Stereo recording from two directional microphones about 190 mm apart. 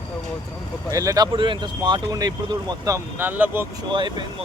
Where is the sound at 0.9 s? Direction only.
20° right (ahead or behind).